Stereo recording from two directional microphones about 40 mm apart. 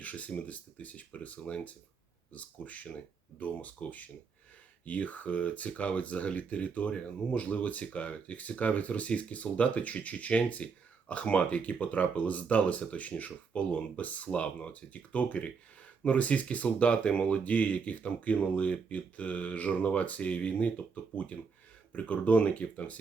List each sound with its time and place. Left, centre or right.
0.0 s speech: left